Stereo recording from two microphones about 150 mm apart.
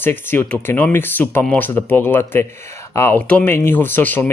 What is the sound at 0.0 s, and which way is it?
Speech, 15° left (ahead or behind).